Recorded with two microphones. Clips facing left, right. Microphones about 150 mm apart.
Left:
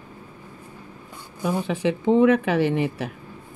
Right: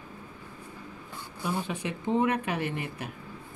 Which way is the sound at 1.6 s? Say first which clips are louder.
Left 10 dB; 90° left.